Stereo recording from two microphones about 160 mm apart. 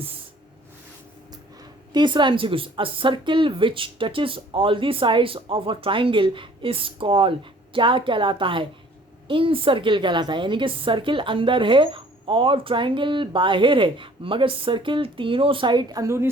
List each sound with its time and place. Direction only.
1.9 s a woman's voice: 30° right (ahead or behind)